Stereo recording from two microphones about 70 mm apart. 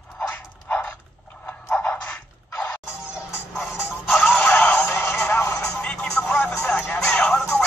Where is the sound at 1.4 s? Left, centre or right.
Left.